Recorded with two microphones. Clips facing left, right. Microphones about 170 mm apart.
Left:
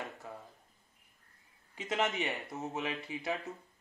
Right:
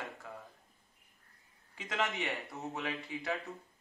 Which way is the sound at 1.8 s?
20° left (ahead or behind).